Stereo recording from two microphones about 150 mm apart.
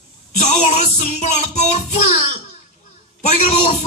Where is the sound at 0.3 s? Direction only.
50° left (ahead or behind).